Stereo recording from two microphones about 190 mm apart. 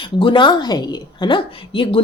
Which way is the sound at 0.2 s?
25° left (ahead or behind).